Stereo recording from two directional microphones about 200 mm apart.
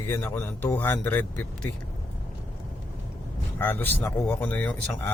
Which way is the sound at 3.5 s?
10° left (ahead or behind).